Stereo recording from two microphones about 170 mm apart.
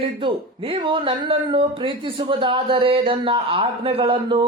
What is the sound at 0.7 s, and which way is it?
Speech, 30° right (ahead or behind).